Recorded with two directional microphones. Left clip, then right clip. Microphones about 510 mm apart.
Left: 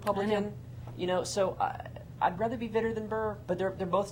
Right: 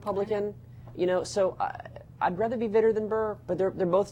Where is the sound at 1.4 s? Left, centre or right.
Right.